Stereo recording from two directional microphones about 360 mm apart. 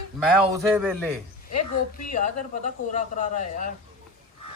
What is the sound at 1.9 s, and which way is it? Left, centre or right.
Speech, left.